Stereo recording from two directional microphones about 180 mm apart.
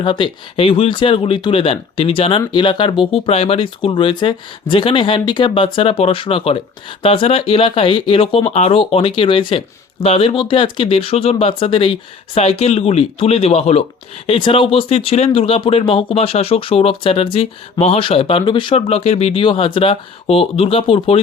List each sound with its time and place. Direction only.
0.0 s speech: 30° left (ahead or behind)